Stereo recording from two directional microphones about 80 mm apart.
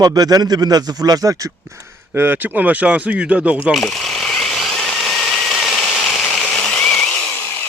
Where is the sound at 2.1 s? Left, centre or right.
Right.